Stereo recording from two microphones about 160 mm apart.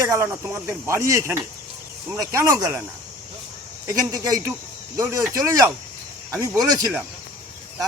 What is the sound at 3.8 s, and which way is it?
Speech, 20° right (ahead or behind).